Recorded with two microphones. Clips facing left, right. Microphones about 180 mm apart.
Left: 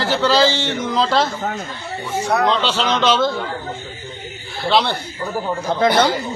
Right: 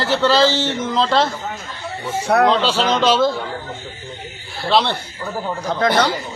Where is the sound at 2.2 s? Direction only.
60° right (ahead or behind).